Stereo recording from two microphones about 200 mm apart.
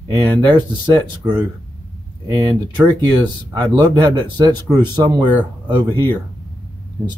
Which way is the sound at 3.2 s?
20° right (ahead or behind).